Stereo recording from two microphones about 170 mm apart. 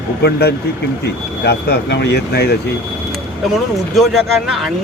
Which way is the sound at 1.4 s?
85° left.